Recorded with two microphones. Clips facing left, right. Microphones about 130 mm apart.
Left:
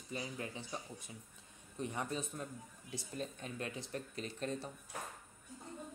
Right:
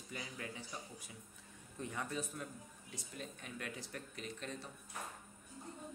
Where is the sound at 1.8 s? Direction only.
20° left (ahead or behind).